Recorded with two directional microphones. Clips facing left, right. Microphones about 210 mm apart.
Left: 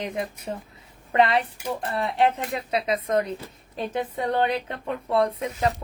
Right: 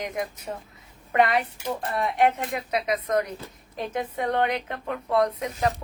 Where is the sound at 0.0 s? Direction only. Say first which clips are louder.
Left 1 dB; 30° left (ahead or behind).